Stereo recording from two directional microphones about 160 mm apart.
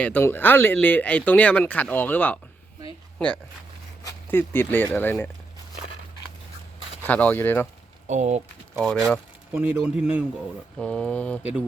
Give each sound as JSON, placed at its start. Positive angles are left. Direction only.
{"t": 0.0, "sound": "speech", "side_deg": 10}
{"t": 4.0, "sound": "speech", "side_deg": 15}
{"t": 7.0, "sound": "speech", "side_deg": 10}
{"t": 8.0, "sound": "speech", "side_deg": -45}
{"t": 8.8, "sound": "speech", "side_deg": 5}
{"t": 9.5, "sound": "speech", "side_deg": -10}
{"t": 10.8, "sound": "speech", "side_deg": 5}